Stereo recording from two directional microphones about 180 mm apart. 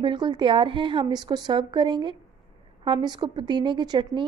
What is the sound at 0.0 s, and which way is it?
A woman's voice, 25° right (ahead or behind).